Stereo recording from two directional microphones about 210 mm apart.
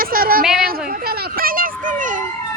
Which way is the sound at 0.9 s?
45° right (ahead or behind).